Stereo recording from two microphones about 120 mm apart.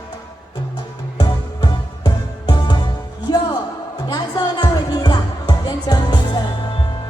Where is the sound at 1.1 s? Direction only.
35° left (ahead or behind).